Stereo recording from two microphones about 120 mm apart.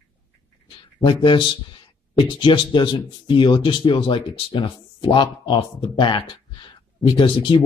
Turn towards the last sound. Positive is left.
turn(degrees=45)  # may be behind; listen again after turning